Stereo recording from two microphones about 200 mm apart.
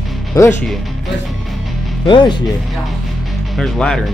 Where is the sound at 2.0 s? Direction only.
25° left (ahead or behind).